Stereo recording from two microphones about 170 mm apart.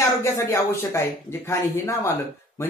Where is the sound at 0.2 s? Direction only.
15° left (ahead or behind).